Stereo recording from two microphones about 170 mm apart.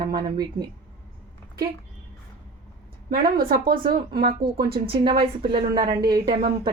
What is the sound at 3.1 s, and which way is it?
A woman's voice, 60° right (ahead or behind).